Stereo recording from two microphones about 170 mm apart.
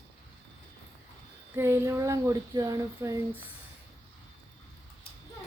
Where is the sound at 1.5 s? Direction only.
15° right (ahead or behind).